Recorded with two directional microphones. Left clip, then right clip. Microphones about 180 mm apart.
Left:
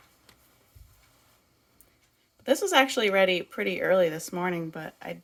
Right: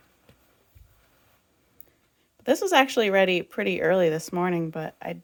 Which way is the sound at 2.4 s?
35° right (ahead or behind).